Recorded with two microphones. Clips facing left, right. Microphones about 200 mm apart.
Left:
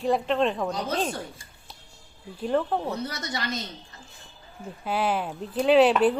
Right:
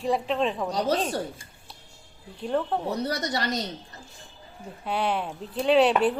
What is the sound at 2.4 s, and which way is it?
Speech, centre (ahead or behind).